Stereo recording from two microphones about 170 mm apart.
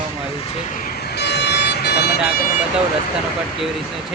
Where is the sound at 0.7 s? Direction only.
70° left (ahead or behind).